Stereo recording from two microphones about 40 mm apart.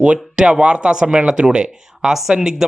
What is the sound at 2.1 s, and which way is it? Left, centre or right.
Speech, centre.